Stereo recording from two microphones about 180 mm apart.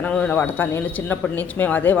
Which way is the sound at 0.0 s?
10° left (ahead or behind).